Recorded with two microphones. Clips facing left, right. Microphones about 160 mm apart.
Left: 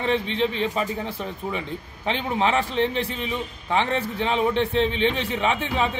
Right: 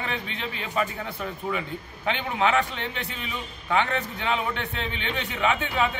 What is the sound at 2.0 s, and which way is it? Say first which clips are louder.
A man's voice: left 2 dB; 35° left (ahead or behind).